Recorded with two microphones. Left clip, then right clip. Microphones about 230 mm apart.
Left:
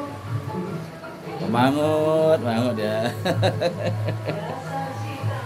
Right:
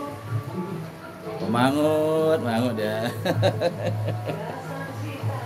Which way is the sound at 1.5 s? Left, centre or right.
Centre.